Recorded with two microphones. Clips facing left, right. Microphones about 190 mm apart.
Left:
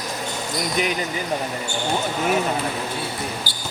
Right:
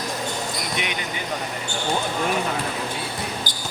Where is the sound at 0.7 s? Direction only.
40° left (ahead or behind).